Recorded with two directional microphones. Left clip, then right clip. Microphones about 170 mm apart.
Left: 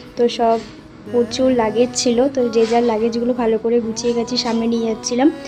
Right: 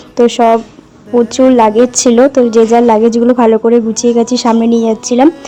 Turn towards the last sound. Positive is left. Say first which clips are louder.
# right 9 dB
turn(degrees=-45)  # may be behind; listen again after turning